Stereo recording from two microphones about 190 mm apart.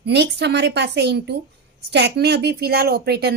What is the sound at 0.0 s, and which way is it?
A woman's voice, 60° right (ahead or behind).